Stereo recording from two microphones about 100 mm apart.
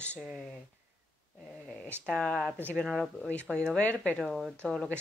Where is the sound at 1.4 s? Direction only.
10° left (ahead or behind).